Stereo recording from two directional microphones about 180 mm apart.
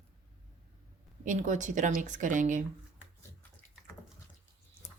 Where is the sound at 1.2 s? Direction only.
45° right (ahead or behind).